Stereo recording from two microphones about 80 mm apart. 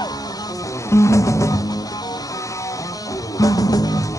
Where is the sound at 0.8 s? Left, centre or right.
Left.